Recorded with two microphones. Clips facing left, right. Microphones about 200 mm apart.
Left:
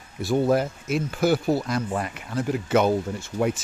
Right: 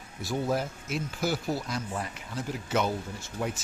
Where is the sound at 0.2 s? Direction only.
65° left (ahead or behind).